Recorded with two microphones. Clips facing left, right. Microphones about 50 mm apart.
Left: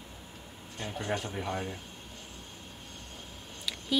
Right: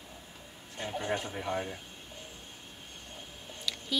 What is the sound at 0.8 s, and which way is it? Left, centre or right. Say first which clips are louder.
Speech: right 1 dB; centre.